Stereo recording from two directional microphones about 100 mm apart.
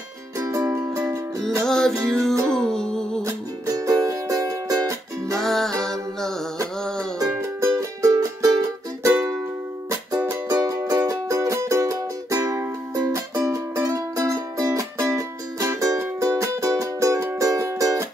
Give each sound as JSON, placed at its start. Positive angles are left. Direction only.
{"t": 0.4, "sound": "music", "side_deg": -35}
{"t": 0.7, "sound": "music", "side_deg": -25}
{"t": 1.7, "sound": "music", "side_deg": 5}
{"t": 3.2, "sound": "music", "side_deg": -30}
{"t": 5.4, "sound": "music", "side_deg": 5}
{"t": 7.2, "sound": "music", "side_deg": -35}